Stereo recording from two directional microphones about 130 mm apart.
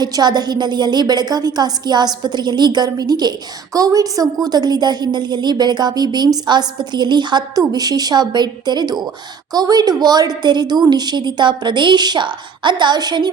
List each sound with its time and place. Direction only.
0.0 s a woman's voice: 35° right (ahead or behind)